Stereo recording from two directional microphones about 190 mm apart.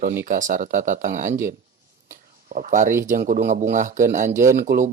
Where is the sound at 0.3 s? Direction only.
45° right (ahead or behind).